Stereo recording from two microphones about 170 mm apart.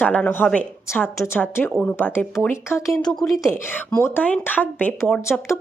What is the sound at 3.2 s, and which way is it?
Speech, centre (ahead or behind).